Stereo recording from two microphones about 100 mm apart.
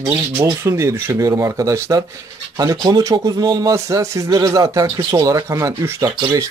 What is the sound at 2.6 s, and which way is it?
A man's voice, 40° right (ahead or behind).